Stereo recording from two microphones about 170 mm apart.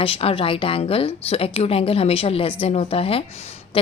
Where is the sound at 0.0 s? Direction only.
35° left (ahead or behind).